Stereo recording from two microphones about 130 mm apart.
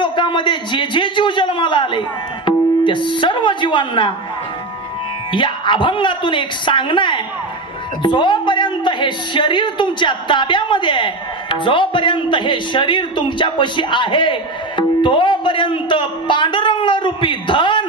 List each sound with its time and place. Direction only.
0.0 s a man's voice: 40° left (ahead or behind)
5.3 s a woman's voice: 40° left (ahead or behind)